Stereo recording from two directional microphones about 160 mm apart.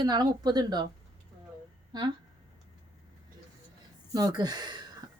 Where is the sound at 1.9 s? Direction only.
25° right (ahead or behind).